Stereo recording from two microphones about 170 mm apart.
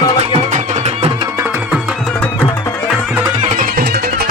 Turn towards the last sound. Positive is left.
turn(degrees=-60)  # may be behind; listen again after turning